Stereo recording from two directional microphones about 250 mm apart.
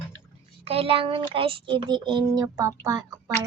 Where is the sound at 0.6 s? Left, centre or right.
Right.